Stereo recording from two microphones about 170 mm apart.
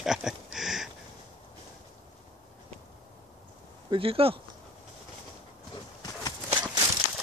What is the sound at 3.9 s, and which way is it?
Speech, 35° right (ahead or behind).